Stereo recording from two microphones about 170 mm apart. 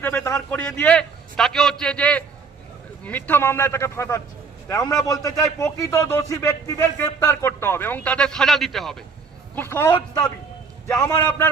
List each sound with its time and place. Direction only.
0.0 s a man's voice: 10° left (ahead or behind)
9.6 s speech: 15° left (ahead or behind)
11.0 s speech: 10° left (ahead or behind)